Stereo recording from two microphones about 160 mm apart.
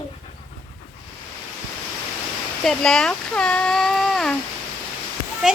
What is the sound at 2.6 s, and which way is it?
Speech, 5° left (ahead or behind).